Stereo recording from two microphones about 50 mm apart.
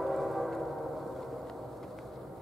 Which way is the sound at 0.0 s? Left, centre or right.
Centre.